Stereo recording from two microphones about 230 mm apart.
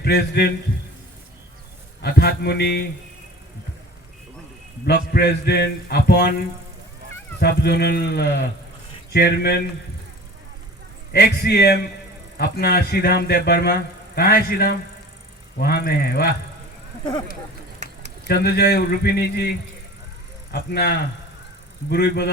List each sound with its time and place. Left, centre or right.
0.0 s a man's voice: left
2.0 s a man's voice: left
4.9 s a man's voice: left
7.3 s a man's voice: left
11.1 s a man's voice: left
18.3 s a man's voice: left